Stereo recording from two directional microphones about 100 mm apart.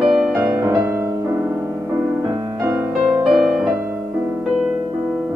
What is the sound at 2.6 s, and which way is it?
Music, 20° right (ahead or behind).